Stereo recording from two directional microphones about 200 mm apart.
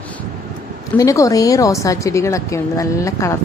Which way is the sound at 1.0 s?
15° left (ahead or behind).